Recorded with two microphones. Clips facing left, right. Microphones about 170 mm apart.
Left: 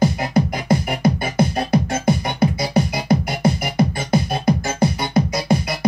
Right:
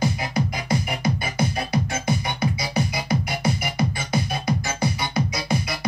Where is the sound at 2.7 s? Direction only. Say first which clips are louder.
Left 6 dB; 55° left (ahead or behind).